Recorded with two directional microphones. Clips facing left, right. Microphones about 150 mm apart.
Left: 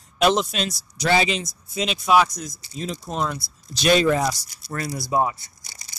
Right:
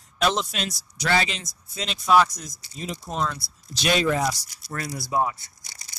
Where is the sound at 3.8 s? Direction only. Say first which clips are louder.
Left 4 dB; 40° left (ahead or behind); by 5.3 s 25° left (ahead or behind).